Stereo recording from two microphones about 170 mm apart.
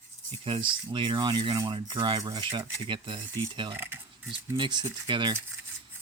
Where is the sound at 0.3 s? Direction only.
30° right (ahead or behind).